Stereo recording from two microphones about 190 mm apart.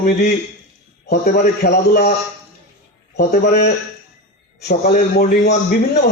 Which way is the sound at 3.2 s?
55° left (ahead or behind).